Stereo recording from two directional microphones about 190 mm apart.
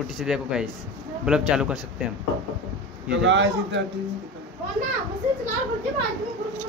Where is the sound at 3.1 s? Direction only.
70° right (ahead or behind).